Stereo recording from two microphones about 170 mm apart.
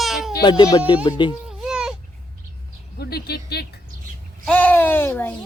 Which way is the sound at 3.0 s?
70° left (ahead or behind).